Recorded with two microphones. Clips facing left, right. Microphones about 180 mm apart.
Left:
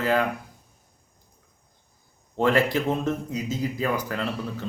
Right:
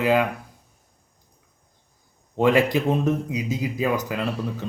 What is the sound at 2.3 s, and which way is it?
A man's voice, 15° right (ahead or behind).